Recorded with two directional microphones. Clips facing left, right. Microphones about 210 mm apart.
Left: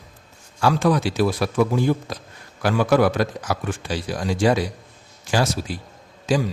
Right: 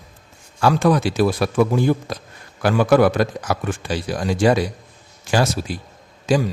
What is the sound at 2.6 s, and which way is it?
A man's voice, 55° right (ahead or behind).